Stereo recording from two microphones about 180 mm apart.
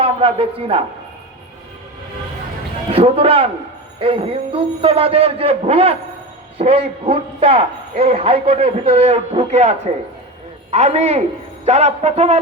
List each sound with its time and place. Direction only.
0.0 s a man's voice: 30° right (ahead or behind)
2.9 s a man's voice: 30° right (ahead or behind)